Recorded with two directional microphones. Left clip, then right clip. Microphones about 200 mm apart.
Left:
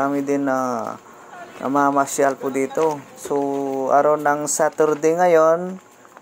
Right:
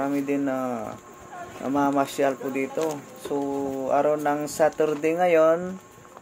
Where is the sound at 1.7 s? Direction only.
20° left (ahead or behind).